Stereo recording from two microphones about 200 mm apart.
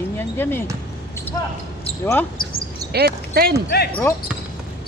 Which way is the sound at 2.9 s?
50° right (ahead or behind).